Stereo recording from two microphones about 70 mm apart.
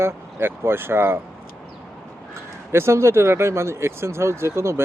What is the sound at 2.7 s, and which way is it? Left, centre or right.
Speech, right.